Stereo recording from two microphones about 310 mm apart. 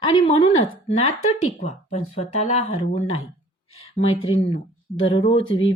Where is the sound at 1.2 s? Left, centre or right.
Left.